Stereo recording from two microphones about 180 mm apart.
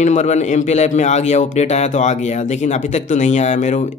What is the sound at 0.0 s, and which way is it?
A man's voice, 40° left (ahead or behind).